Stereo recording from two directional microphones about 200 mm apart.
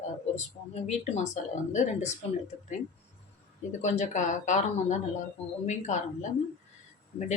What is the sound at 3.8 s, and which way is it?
Speech, 35° left (ahead or behind).